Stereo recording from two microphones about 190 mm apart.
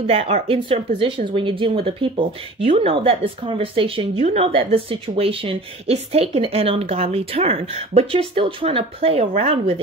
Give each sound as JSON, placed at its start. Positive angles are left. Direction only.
{"t": 0.0, "sound": "speech", "side_deg": -35}